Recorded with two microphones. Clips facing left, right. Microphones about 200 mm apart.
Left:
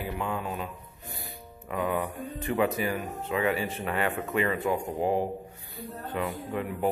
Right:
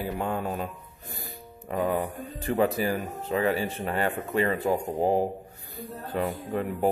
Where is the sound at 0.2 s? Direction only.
40° right (ahead or behind).